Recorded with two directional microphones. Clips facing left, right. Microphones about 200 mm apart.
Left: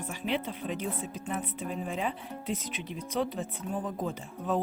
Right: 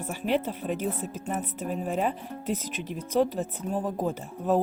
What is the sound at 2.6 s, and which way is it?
Speech, centre (ahead or behind).